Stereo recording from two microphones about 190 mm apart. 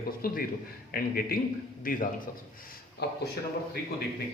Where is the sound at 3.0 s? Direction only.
60° left (ahead or behind).